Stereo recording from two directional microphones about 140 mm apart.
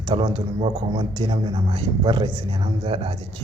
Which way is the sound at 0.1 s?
35° right (ahead or behind).